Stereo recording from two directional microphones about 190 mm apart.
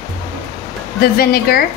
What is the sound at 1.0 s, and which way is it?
Speech, 55° left (ahead or behind).